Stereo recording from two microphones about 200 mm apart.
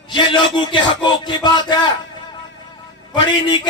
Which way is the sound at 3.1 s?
20° left (ahead or behind).